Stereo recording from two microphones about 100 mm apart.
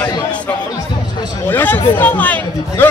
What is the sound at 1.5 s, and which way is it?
Speech, 20° left (ahead or behind).